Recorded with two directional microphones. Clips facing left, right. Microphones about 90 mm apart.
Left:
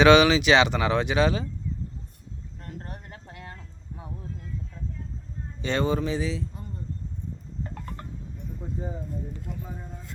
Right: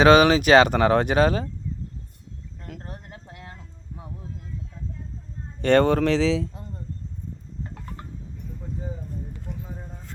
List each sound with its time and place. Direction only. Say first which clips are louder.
0.0 s speech: right 2 dB; 40° right (ahead or behind)
2.7 s speech: even; 90° right
5.6 s speech: right 8 dB; 60° right (ahead or behind); by 6.4 s 90° right
7.6 s a sound: left 1 dB; 5° right (ahead or behind)